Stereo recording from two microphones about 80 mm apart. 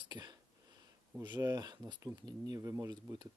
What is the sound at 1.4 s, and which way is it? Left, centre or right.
Speech, right.